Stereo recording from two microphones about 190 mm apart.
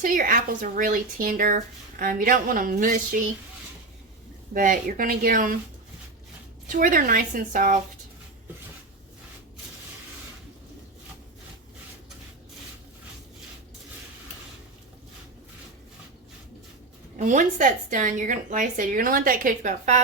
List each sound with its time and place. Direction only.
0.0 s speech: 45° right (ahead or behind)
4.5 s speech: 45° right (ahead or behind)
6.7 s speech: 45° right (ahead or behind)
17.2 s speech: 40° right (ahead or behind)